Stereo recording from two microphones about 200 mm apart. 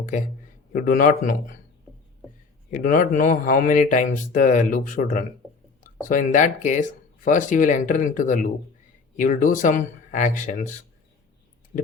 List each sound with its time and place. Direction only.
0.0 s a man's voice: 40° left (ahead or behind)
2.6 s speech: 40° left (ahead or behind)